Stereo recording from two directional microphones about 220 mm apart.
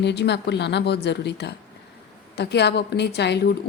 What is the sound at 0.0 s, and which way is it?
A woman's voice, 50° left (ahead or behind).